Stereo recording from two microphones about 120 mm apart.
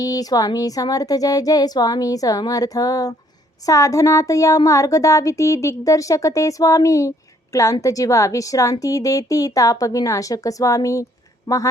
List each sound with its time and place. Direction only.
0.0 s speech: 30° left (ahead or behind)